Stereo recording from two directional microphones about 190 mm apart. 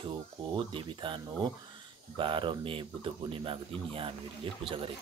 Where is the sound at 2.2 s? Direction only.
25° right (ahead or behind).